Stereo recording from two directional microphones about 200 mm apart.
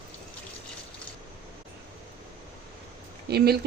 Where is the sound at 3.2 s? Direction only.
55° right (ahead or behind).